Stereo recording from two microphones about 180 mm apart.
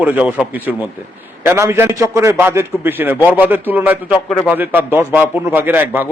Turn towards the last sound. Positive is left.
turn(degrees=-10)  # may be behind; listen again after turning